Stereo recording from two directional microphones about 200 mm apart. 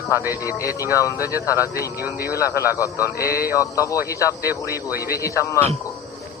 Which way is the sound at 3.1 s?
50° left (ahead or behind).